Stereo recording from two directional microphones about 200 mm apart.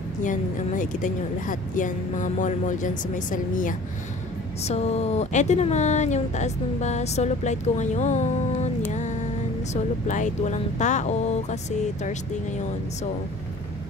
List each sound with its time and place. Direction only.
0.2 s speech: 40° left (ahead or behind)
8.8 s mantra: 35° left (ahead or behind)
10.0 s speech: 40° left (ahead or behind)